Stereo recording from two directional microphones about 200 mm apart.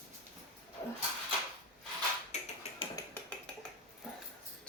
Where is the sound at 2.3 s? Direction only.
35° left (ahead or behind).